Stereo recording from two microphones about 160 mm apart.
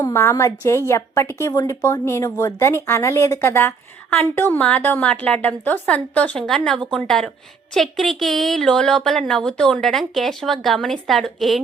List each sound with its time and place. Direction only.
0.0 s a woman's voice: 15° left (ahead or behind); by 11.6 s centre (ahead or behind)